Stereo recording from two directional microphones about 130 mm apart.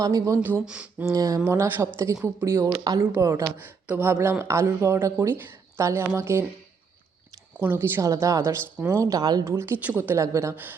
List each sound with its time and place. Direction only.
0.0 s speech: 30° right (ahead or behind)
0.3 s speech: 10° right (ahead or behind)
1.0 s speech: 25° right (ahead or behind)
7.6 s speech: 15° right (ahead or behind)
9.4 s speech: 20° right (ahead or behind)